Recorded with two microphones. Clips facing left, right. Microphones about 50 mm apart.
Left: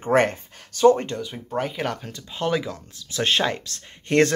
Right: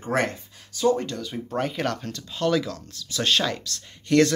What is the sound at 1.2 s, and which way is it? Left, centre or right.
Speech, centre.